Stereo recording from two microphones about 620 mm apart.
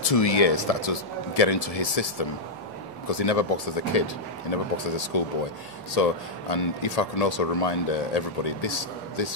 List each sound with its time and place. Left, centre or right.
0.0 s speech: left